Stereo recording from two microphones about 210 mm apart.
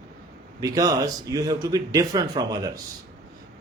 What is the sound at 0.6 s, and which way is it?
A man's voice, 15° right (ahead or behind).